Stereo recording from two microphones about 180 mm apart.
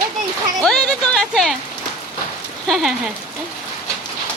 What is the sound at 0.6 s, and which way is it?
Music, centre (ahead or behind).